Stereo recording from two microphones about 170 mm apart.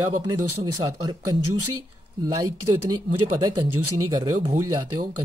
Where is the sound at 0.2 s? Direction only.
20° right (ahead or behind).